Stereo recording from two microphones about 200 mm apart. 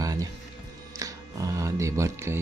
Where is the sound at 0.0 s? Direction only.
15° right (ahead or behind).